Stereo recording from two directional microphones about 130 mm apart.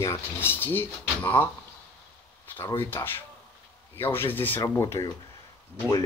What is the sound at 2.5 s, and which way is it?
Speech, 20° left (ahead or behind).